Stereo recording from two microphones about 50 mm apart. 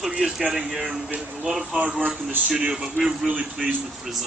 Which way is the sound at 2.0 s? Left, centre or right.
Right.